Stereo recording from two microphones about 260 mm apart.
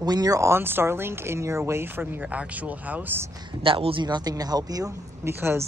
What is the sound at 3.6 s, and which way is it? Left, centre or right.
Speech, right.